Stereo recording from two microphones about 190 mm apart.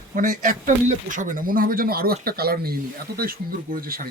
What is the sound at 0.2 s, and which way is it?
Speech, 45° right (ahead or behind).